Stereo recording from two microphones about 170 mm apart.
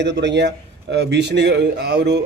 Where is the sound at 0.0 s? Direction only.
90° right.